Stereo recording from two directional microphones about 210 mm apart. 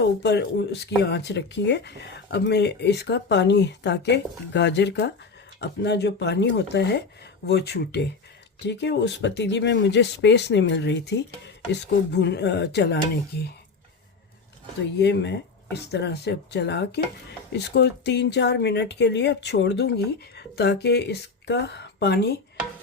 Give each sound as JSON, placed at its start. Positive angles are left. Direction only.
{"t": 0.0, "sound": "speech", "side_deg": 55}
{"t": 14.9, "sound": "speech", "side_deg": 55}